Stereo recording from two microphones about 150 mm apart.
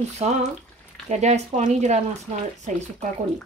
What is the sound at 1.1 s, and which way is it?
Speech, 50° right (ahead or behind).